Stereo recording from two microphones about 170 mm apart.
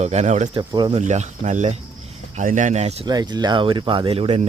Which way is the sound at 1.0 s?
45° right (ahead or behind).